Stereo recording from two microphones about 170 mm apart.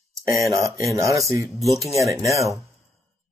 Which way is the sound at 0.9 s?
20° right (ahead or behind).